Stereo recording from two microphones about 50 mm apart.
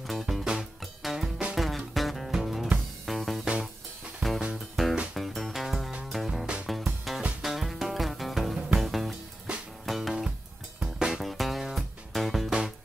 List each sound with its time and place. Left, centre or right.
0.0 s music: centre
9.5 s music: centre
9.8 s music: centre
10.8 s music: centre
11.1 s music: centre